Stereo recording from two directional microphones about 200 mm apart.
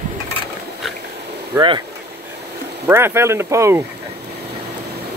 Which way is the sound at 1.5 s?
25° right (ahead or behind).